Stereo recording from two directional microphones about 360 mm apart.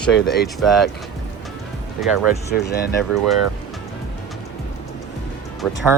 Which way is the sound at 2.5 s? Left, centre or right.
Left.